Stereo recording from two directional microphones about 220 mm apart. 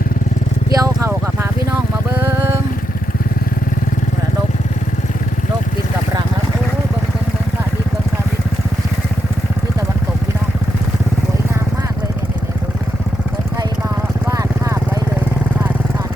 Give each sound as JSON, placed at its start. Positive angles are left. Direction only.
{"t": 0.7, "sound": "vehicle", "side_deg": -15}
{"t": 14.3, "sound": "vehicle", "side_deg": -15}